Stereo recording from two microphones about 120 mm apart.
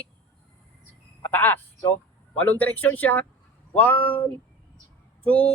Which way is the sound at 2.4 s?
15° left (ahead or behind).